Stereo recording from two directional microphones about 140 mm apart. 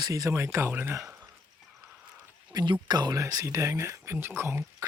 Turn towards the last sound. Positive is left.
turn(degrees=-15)  # may be behind; listen again after turning